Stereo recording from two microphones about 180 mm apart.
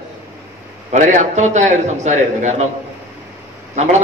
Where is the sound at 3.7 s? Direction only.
40° right (ahead or behind).